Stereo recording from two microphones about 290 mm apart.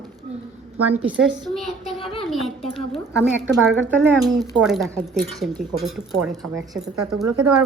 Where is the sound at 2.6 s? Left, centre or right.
Centre.